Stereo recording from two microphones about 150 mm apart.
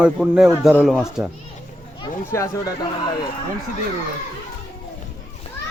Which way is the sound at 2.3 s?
20° left (ahead or behind).